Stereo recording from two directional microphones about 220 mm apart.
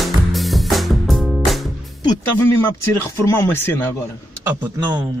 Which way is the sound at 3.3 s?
10° left (ahead or behind).